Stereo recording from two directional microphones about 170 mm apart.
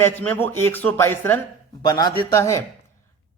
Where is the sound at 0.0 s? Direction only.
10° left (ahead or behind).